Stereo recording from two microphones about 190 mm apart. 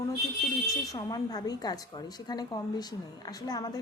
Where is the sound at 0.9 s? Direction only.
20° left (ahead or behind).